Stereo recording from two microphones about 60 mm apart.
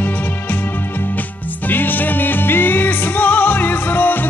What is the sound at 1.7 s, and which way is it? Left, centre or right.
Music, left.